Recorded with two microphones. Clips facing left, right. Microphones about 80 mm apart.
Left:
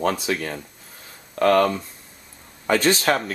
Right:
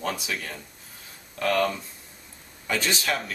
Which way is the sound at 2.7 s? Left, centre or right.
Left.